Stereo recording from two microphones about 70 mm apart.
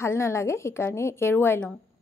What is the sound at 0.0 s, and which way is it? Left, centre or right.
A woman's voice, left.